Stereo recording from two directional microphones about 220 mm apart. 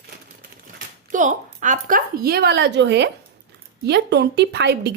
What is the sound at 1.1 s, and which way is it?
A woman's voice, 35° right (ahead or behind).